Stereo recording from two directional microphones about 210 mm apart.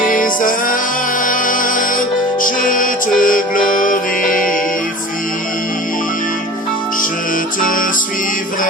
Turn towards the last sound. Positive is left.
turn(degrees=40)  # may be behind; listen again after turning